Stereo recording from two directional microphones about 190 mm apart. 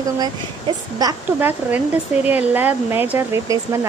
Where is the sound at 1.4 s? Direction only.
10° right (ahead or behind).